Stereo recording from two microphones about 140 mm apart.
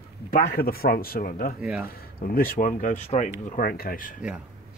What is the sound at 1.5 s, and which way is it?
Speech, 5° right (ahead or behind).